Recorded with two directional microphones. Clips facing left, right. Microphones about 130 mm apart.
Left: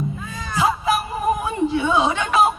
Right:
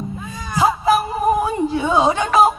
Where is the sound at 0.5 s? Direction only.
40° right (ahead or behind).